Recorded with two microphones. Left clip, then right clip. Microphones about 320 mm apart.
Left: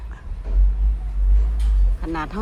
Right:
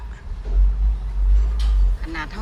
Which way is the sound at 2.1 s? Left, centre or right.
Centre.